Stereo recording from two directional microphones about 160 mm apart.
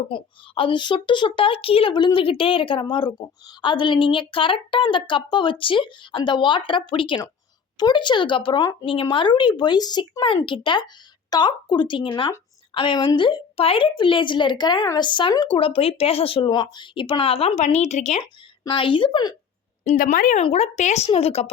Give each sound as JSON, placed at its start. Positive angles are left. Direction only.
{"t": 0.1, "sound": "a woman's voice", "side_deg": 30}
{"t": 18.6, "sound": "a woman's voice", "side_deg": 30}
{"t": 19.9, "sound": "speech", "side_deg": 60}
{"t": 20.4, "sound": "a woman's voice", "side_deg": 40}